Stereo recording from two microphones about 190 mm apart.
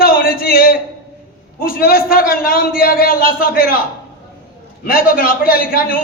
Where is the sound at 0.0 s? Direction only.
50° left (ahead or behind).